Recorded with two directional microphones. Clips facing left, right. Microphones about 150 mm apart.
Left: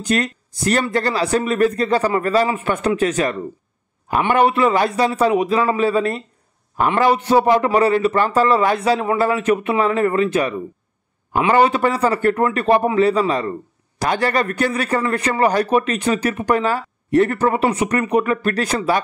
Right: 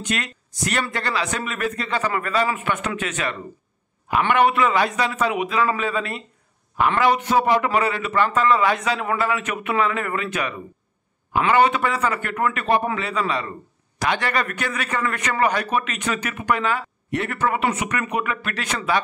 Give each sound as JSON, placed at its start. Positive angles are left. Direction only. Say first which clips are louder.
{"t": 0.0, "sound": "a man's voice", "louder": "left 7 dB", "side_deg": 35}
{"t": 11.5, "sound": "a man's voice", "louder": "left 3 dB", "side_deg": 35}